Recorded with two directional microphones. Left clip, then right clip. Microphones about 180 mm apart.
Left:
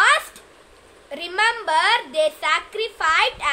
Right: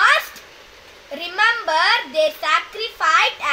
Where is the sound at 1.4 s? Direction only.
35° left (ahead or behind).